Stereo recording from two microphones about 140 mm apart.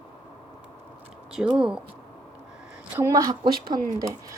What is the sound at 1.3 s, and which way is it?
Speech, 5° right (ahead or behind).